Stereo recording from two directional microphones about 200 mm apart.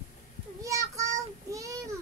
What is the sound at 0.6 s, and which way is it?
Child singing, 15° right (ahead or behind).